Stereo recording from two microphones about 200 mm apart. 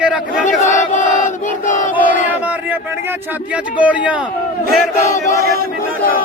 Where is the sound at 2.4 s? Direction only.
10° right (ahead or behind).